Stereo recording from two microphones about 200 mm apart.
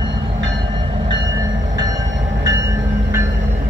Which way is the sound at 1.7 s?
20° right (ahead or behind).